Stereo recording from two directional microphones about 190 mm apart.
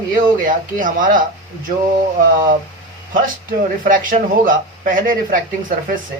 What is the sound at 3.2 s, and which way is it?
Speech, 45° right (ahead or behind).